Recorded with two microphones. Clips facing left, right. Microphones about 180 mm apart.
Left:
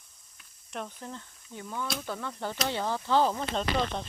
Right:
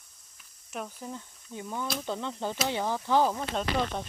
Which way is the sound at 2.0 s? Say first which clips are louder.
Right 2 dB; 20° right (ahead or behind).